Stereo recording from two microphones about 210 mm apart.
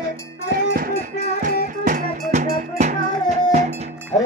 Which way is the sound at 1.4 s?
35° right (ahead or behind).